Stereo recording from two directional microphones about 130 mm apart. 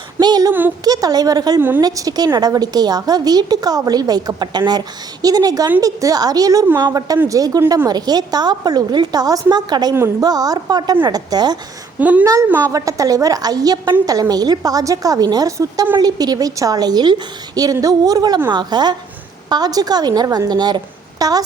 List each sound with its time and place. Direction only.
0.2 s a woman's voice: 30° right (ahead or behind)
11.9 s a woman's voice: 10° right (ahead or behind)
12.2 s a woman's voice: 25° right (ahead or behind)